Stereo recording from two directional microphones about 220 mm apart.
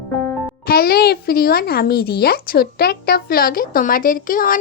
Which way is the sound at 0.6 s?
45° left (ahead or behind).